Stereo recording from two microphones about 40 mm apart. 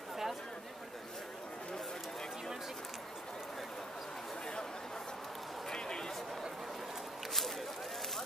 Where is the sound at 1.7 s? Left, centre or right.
Centre.